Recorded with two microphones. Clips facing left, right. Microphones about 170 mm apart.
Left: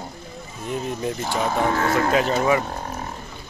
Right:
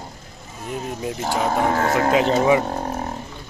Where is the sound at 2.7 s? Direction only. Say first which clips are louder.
Right 5 dB; 35° right (ahead or behind).